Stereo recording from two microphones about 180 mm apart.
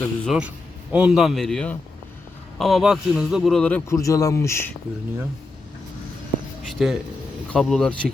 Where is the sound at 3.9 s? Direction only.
20° left (ahead or behind).